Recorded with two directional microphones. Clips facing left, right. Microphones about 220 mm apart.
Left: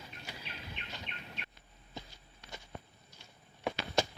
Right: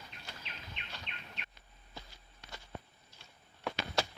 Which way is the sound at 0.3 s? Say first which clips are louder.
Left 3 dB; 10° left (ahead or behind).